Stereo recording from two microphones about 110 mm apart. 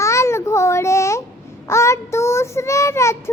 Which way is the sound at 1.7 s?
25° left (ahead or behind).